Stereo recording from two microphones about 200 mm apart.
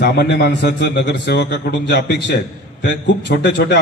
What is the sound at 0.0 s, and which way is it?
A man's voice, 55° left (ahead or behind).